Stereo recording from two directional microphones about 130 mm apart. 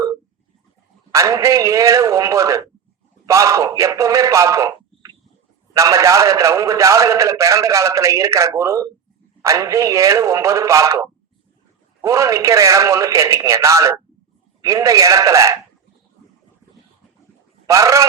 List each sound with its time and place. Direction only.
1.1 s a man's voice: 25° right (ahead or behind)
17.7 s a man's voice: 25° right (ahead or behind)